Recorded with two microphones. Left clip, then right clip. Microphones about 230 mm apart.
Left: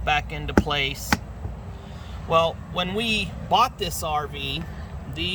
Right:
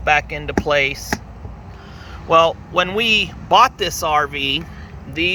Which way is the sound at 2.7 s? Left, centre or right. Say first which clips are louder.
Right 10 dB; centre.